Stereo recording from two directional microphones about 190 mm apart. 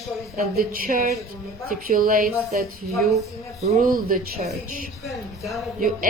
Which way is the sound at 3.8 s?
45° right (ahead or behind).